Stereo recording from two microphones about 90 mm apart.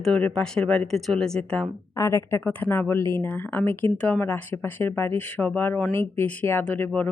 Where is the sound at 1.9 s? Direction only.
35° left (ahead or behind).